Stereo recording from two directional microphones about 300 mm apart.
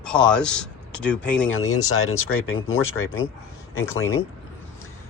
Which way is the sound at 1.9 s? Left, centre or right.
Left.